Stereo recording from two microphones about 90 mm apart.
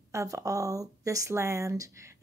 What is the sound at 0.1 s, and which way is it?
Speech, 35° right (ahead or behind).